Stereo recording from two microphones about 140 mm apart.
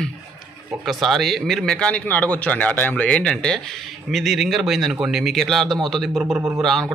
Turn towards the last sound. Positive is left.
turn(degrees=5)  # may be behind; listen again after turning